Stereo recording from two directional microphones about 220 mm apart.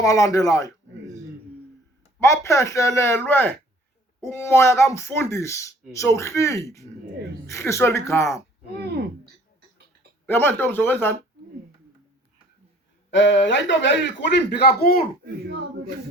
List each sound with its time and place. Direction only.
0.0 s speech: 15° left (ahead or behind)
2.2 s speech: 15° left (ahead or behind)
10.2 s speech: 10° left (ahead or behind)
13.1 s a man's voice: 55° left (ahead or behind)